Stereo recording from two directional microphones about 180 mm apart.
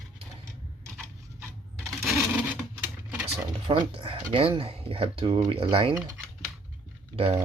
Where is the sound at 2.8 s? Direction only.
10° right (ahead or behind).